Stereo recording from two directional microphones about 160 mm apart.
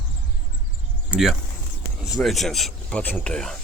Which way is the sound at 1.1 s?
Centre (ahead or behind).